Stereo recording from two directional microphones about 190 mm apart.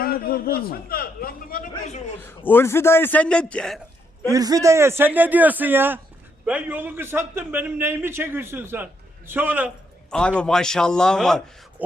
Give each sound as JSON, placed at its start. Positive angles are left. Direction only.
{"t": 0.0, "sound": "a man's voice", "side_deg": 50}
{"t": 2.2, "sound": "a man's voice", "side_deg": 10}
{"t": 4.3, "sound": "a man's voice", "side_deg": -20}
{"t": 10.1, "sound": "a man's voice", "side_deg": 5}